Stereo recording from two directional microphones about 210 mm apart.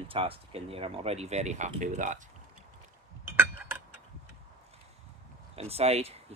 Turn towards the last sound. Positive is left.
turn(degrees=-30)  # may be behind; listen again after turning